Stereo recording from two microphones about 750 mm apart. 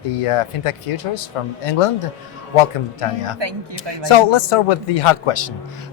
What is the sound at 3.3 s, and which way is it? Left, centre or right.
Speech, right.